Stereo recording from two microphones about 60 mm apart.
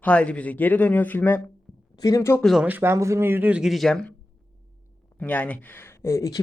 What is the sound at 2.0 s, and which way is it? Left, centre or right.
Speech, left.